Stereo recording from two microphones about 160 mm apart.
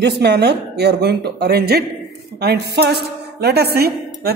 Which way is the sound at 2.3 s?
90° right.